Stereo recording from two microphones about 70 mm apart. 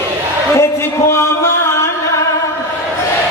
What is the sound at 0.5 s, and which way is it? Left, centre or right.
Music, left.